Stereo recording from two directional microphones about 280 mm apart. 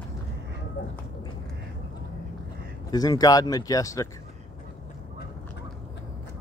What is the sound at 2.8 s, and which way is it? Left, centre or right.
Speech, centre.